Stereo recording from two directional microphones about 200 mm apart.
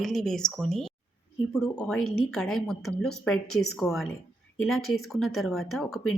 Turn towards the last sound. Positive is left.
turn(degrees=0)  # may be behind; listen again after turning